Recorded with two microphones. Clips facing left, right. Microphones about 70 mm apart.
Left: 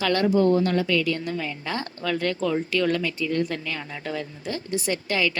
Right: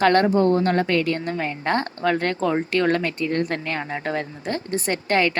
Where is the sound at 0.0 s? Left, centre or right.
Right.